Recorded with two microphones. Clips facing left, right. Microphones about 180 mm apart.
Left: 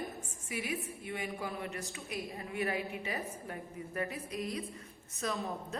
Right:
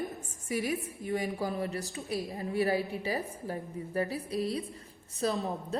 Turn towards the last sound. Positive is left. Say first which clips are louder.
# right 5 dB
turn(degrees=-35)  # may be behind; listen again after turning